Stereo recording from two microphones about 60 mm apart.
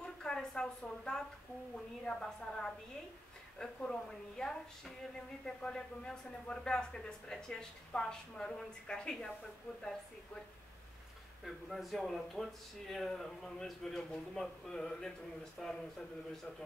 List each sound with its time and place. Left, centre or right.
0.0 s a sound: centre
2.0 s speech: centre
11.4 s speech: centre